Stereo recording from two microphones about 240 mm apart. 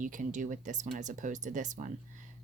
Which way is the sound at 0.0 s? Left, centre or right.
Right.